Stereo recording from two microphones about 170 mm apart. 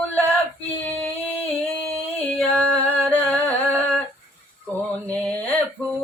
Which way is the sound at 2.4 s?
10° left (ahead or behind).